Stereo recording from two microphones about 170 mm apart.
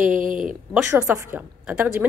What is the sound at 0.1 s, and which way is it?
Speech, 50° right (ahead or behind).